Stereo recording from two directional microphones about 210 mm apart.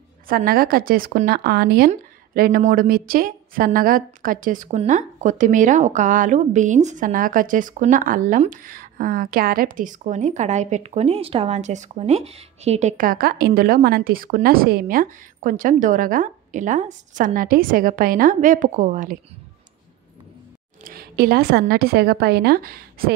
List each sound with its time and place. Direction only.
0.3 s a woman's voice: 45° right (ahead or behind)
20.8 s a woman's voice: 45° right (ahead or behind)